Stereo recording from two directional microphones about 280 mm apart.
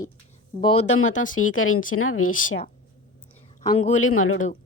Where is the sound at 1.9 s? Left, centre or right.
Left.